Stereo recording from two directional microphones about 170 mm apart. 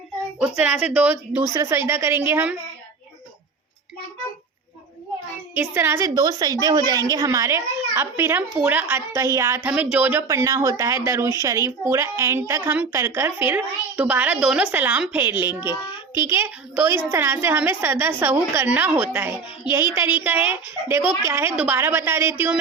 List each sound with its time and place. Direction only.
0.3 s a woman's voice: 5° right (ahead or behind)
5.5 s a woman's voice: 15° right (ahead or behind)
15.7 s child singing: 25° left (ahead or behind)
16.3 s a woman's voice: 15° right (ahead or behind)
20.5 s a woman's voice: 10° right (ahead or behind)